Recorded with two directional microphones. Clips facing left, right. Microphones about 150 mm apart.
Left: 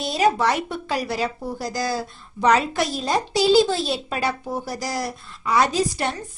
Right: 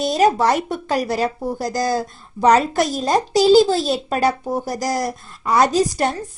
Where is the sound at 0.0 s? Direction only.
40° right (ahead or behind).